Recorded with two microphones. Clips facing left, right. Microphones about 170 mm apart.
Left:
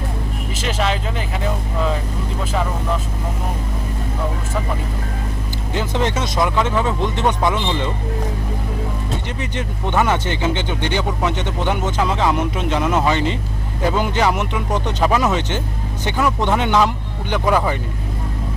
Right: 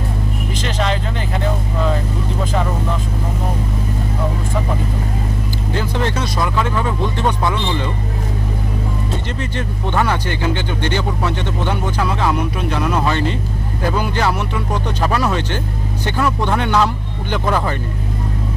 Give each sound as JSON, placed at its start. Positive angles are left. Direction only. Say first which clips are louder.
{"t": 0.5, "sound": "speech", "louder": "even", "side_deg": 5}
{"t": 5.7, "sound": "speech", "louder": "left 1 dB", "side_deg": 20}
{"t": 9.4, "sound": "speech", "louder": "right 1 dB", "side_deg": 15}